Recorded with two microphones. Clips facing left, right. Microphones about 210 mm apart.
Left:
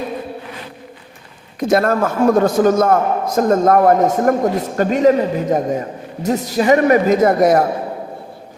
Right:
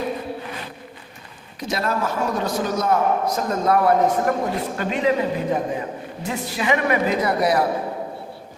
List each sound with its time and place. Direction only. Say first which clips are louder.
1.5 s a man's voice: left 9 dB; 50° left (ahead or behind)